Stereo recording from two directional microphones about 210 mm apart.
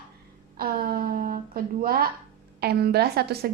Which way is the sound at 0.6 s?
45° right (ahead or behind).